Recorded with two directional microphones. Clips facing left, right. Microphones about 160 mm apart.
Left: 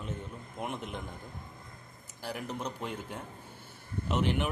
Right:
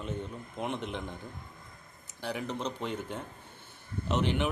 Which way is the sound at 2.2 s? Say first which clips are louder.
Right 3 dB; 5° left (ahead or behind).